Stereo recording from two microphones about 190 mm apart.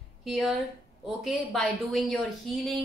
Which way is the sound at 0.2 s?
Centre (ahead or behind).